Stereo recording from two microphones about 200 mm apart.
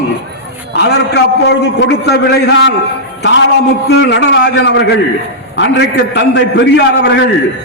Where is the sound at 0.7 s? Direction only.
60° left (ahead or behind).